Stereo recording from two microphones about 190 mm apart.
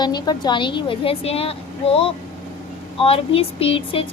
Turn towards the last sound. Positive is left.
turn(degrees=30)  # may be behind; listen again after turning